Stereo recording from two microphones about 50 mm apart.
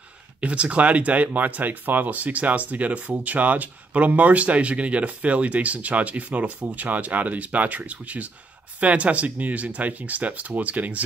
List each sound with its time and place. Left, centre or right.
0.4 s speech: right